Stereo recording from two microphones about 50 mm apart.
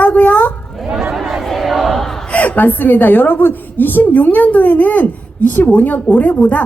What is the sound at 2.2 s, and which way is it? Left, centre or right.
A woman's voice, left.